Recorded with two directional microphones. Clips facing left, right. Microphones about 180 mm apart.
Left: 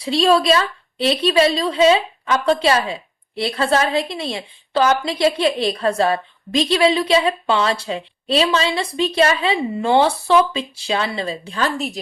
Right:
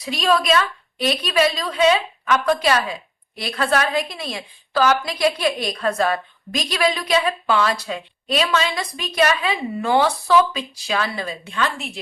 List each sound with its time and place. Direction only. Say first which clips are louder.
0.0 s a woman's voice: left 4 dB; 30° left (ahead or behind)